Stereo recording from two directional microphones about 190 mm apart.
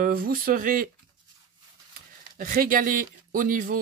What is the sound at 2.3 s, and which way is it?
Speech, 50° right (ahead or behind).